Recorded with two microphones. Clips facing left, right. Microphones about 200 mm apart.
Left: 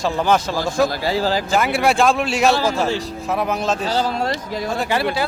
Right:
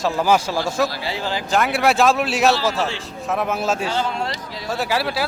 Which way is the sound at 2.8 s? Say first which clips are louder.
Left 4 dB; 40° left (ahead or behind).